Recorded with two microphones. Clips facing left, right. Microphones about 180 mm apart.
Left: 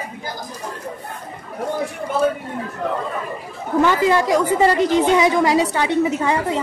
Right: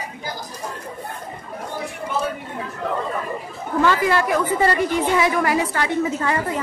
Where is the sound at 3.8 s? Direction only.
20° left (ahead or behind).